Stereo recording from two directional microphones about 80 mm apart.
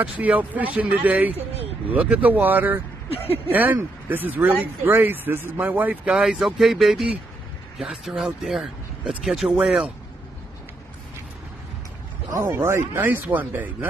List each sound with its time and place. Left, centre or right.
0.0 s speech: centre
6.0 s speech: centre
12.3 s speech: right